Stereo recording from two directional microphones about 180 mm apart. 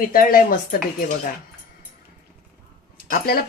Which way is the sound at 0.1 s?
55° left (ahead or behind).